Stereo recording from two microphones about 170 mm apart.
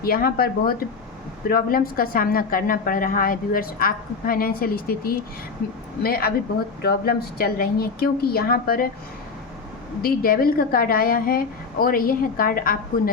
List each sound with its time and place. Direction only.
0.0 s a woman's voice: 60° left (ahead or behind)
10.0 s a woman's voice: 60° left (ahead or behind)